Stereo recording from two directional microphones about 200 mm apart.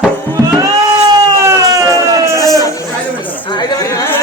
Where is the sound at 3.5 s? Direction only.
20° left (ahead or behind).